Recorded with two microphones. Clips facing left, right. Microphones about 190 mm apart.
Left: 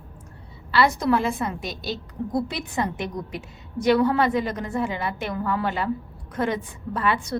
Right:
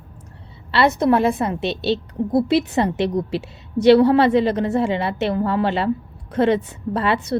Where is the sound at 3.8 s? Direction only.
30° right (ahead or behind).